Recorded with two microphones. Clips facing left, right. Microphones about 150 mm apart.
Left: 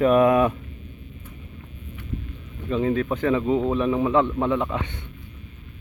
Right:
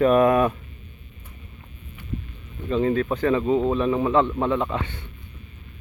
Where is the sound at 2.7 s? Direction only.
10° left (ahead or behind).